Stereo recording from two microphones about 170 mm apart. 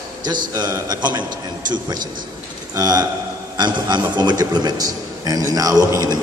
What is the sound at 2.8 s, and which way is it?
A man's voice, 20° right (ahead or behind).